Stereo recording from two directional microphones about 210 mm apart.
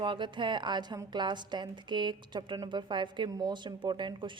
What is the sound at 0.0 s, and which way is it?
A woman's voice, 20° right (ahead or behind).